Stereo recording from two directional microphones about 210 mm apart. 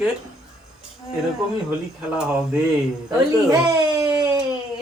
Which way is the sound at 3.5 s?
15° right (ahead or behind).